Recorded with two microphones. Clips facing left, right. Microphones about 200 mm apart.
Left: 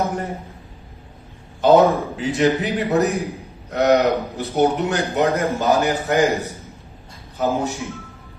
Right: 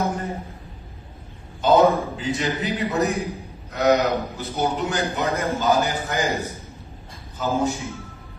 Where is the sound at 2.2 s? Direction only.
65° left (ahead or behind).